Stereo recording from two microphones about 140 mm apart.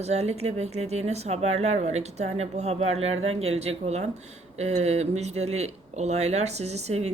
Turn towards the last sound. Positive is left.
turn(degrees=-50)  # may be behind; listen again after turning